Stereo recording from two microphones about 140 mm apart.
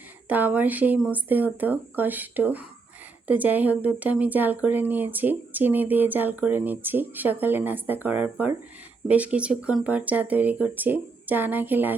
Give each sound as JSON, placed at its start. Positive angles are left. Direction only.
{"t": 0.3, "sound": "a woman's voice", "side_deg": -10}